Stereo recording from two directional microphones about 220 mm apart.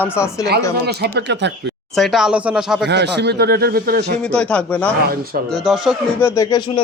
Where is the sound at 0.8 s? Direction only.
50° right (ahead or behind).